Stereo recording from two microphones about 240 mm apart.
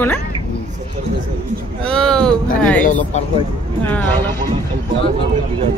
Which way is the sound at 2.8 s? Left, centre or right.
Left.